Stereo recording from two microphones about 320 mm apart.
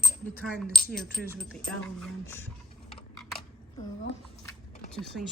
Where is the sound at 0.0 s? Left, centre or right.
Centre.